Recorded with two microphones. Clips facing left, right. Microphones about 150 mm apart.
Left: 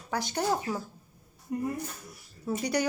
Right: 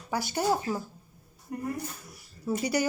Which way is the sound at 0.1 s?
5° right (ahead or behind).